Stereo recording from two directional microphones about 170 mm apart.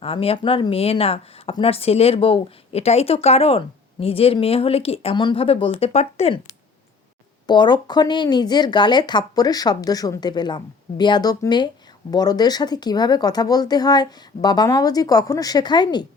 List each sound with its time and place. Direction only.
0.0 s speech: 35° left (ahead or behind)
7.4 s speech: 25° left (ahead or behind)